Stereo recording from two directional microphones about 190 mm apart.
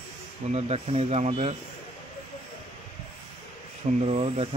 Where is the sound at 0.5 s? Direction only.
35° right (ahead or behind).